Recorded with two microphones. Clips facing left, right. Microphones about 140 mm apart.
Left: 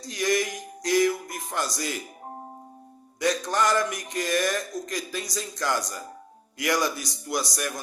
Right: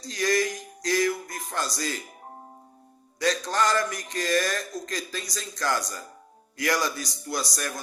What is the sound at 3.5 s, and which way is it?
Speech, 15° left (ahead or behind).